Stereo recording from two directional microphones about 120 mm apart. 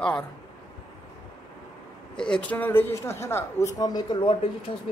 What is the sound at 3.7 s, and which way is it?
Speech, 35° left (ahead or behind).